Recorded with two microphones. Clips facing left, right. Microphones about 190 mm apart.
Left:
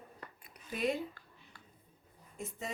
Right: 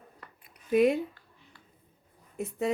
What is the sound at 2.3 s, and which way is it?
Speech, 65° right (ahead or behind).